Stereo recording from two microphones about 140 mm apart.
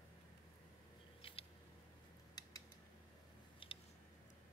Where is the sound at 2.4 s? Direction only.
30° left (ahead or behind).